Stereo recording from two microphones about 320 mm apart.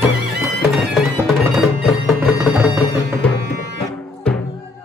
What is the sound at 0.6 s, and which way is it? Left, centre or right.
Music, centre.